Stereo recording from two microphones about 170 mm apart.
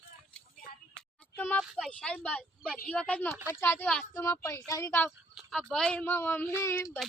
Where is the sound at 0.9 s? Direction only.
10° left (ahead or behind).